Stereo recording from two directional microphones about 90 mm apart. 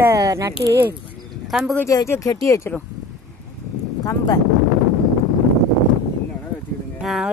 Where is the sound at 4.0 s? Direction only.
40° left (ahead or behind).